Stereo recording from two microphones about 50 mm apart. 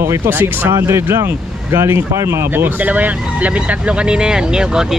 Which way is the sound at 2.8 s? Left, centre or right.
Right.